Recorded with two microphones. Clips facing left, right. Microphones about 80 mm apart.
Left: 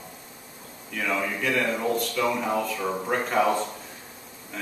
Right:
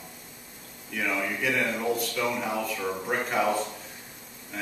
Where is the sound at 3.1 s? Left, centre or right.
Centre.